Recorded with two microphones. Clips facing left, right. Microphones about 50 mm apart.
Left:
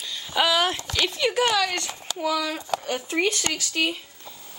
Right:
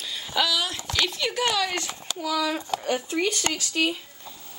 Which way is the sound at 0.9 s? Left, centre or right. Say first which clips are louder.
Left 2 dB; centre.